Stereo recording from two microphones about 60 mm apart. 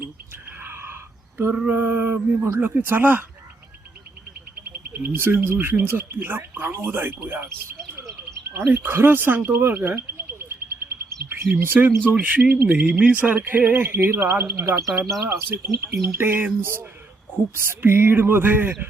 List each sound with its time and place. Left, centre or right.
0.6 s a sound: right
1.7 s speech: right
2.3 s speech: right
2.6 s speech: right
4.7 s speech: right
9.7 s bird: right
12.9 s speech: right